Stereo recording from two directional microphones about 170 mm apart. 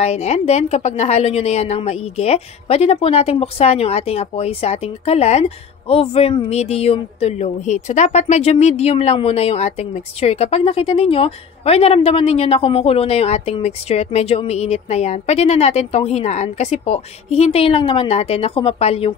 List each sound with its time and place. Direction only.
0.0 s a woman's voice: 40° left (ahead or behind)